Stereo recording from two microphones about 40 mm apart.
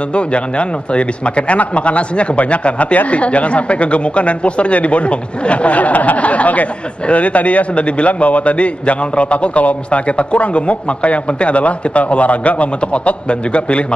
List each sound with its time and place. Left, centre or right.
0.1 s a man's voice: left